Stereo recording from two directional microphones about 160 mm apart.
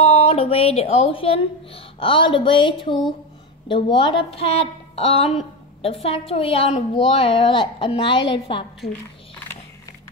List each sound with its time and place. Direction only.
0.0 s a woman's voice: 35° left (ahead or behind)